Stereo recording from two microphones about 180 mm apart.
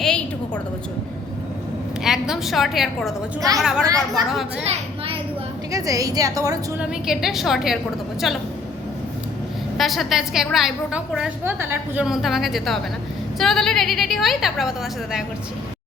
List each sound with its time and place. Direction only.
0.0 s a sound: 5° left (ahead or behind)
2.0 s a woman's voice: 5° right (ahead or behind)
3.8 s a woman's voice: 20° right (ahead or behind)
4.2 s a woman's voice: centre (ahead or behind)
4.7 s a sound: 30° right (ahead or behind)
5.7 s a woman's voice: 20° right (ahead or behind)
6.7 s a woman's voice: centre (ahead or behind)
9.7 s a woman's voice: centre (ahead or behind)